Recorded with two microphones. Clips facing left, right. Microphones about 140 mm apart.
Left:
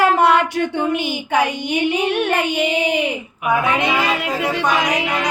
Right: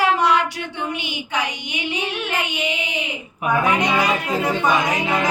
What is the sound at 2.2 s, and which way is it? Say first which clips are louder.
Child singing: left 6 dB; 60° left (ahead or behind).